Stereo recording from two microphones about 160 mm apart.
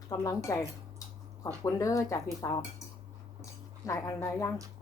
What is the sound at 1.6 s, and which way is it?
A woman's voice, 20° left (ahead or behind).